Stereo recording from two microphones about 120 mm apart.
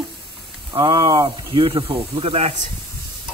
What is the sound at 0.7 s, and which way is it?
Speech, 40° right (ahead or behind).